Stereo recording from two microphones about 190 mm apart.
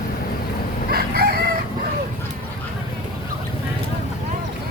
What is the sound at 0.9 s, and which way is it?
Crowing, 55° right (ahead or behind).